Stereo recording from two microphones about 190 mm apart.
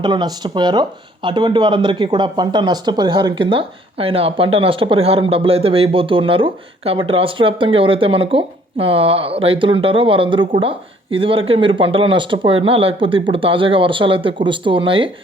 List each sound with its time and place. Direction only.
0.0 s speech: 20° right (ahead or behind)